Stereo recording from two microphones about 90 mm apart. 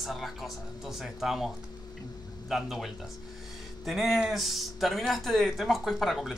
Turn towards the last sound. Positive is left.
turn(degrees=0)  # may be behind; listen again after turning